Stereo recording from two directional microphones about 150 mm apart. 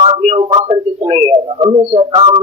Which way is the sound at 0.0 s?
40° right (ahead or behind).